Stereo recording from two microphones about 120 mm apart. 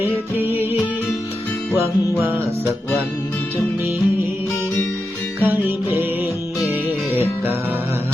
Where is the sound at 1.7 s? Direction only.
20° right (ahead or behind).